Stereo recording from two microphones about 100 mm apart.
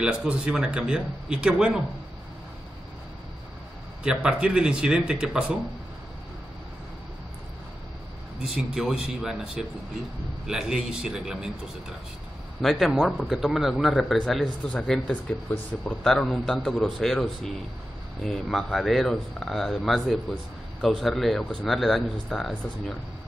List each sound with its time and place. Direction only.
0.0 s speech: 10° right (ahead or behind)
4.0 s speech: 10° right (ahead or behind)
8.7 s speech: 5° right (ahead or behind)
12.6 s speech: centre (ahead or behind)
16.0 s speech: 5° left (ahead or behind)